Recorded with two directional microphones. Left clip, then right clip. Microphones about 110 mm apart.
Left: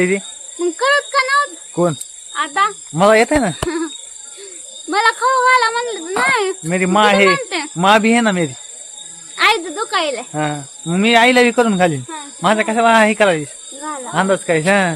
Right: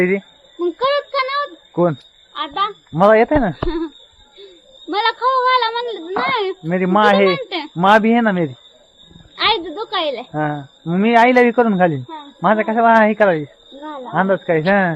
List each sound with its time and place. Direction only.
0.6 s child singing: 30° left (ahead or behind)
1.7 s a child's voice: 20° left (ahead or behind)
3.7 s insect: 30° left (ahead or behind)
4.9 s a child's voice: 35° left (ahead or behind)
7.8 s a child's voice: 20° left (ahead or behind)